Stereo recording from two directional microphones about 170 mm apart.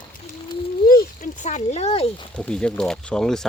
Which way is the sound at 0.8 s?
55° left (ahead or behind).